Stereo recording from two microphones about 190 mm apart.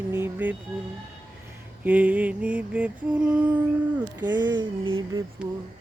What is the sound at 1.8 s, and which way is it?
Mantra, 10° right (ahead or behind).